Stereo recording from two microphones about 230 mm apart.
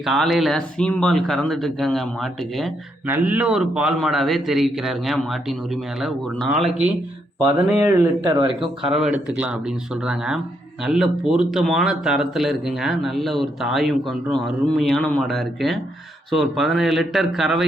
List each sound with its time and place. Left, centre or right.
0.0 s speech: centre
7.8 s speech: centre
9.0 s speech: centre